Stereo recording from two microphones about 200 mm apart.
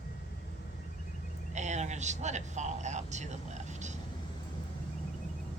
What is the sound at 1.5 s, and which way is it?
Speech, 35° right (ahead or behind).